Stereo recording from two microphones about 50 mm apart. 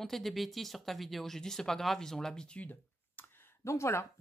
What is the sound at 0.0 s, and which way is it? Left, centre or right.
Speech, centre.